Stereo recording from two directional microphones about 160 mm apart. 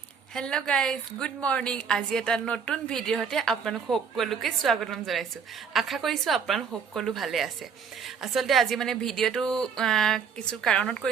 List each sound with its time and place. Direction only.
0.3 s a woman's voice: 5° left (ahead or behind)